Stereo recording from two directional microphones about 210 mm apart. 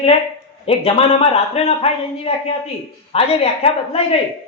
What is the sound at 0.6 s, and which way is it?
A man's voice, 30° left (ahead or behind).